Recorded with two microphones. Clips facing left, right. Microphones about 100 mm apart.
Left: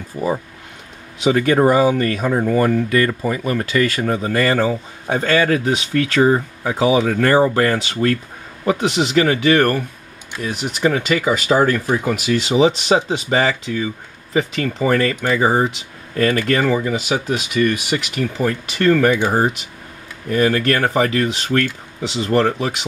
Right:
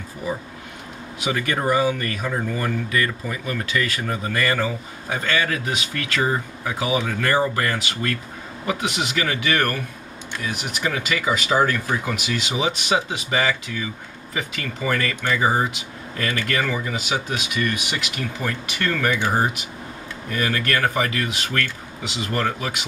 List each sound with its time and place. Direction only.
1.2 s speech: 30° left (ahead or behind)
11.8 s speech: 25° left (ahead or behind)
12.3 s speech: 35° left (ahead or behind)
17.4 s speech: 40° left (ahead or behind)